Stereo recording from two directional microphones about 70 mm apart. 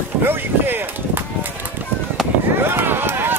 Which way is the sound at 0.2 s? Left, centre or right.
Right.